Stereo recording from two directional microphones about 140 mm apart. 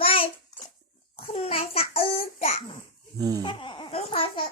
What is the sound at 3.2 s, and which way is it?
Speech, 25° right (ahead or behind).